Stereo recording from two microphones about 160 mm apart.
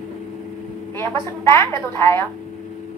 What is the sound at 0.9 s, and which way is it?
A woman's voice, 15° left (ahead or behind).